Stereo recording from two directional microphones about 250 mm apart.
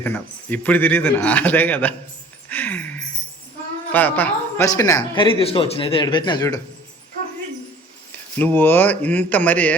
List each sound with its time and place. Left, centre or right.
0.0 s speech: centre
2.5 s a sound: centre
3.9 s speech: centre
8.4 s speech: centre